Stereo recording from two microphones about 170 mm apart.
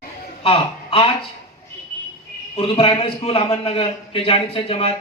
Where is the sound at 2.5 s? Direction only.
35° left (ahead or behind).